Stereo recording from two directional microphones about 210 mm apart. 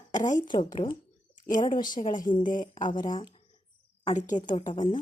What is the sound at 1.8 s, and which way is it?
A woman's voice, 40° left (ahead or behind).